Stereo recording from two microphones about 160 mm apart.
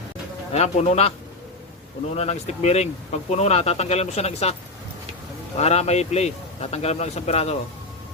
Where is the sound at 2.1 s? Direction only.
40° left (ahead or behind).